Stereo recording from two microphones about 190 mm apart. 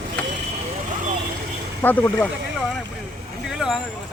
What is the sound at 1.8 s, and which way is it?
Speech, 10° left (ahead or behind).